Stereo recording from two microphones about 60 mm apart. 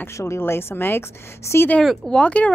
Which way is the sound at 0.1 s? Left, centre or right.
Left.